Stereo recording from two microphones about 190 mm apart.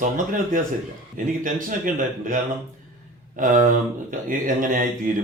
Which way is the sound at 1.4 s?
45° right (ahead or behind).